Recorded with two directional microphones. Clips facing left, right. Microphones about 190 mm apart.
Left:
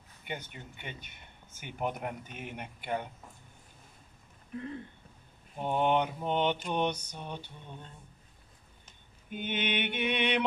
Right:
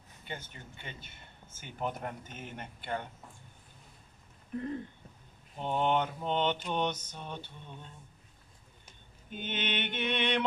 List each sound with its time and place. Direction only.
0.2 s speech: 15° left (ahead or behind)
5.6 s speech: 10° left (ahead or behind)
9.3 s speech: 10° left (ahead or behind)